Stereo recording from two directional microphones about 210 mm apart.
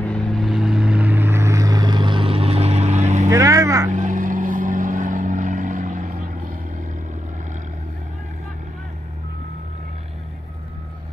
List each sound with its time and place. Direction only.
0.0 s vehicle: 5° left (ahead or behind); by 3.3 s 35° right (ahead or behind)
3.3 s vehicle: 15° right (ahead or behind)
3.9 s vehicle: 40° right (ahead or behind)